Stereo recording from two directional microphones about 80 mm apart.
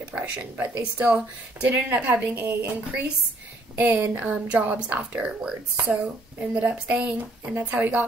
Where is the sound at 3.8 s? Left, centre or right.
Centre.